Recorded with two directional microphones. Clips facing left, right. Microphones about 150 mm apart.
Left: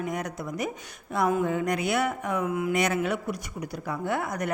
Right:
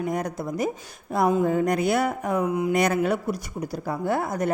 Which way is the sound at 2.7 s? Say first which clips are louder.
Right 5 dB; 40° right (ahead or behind).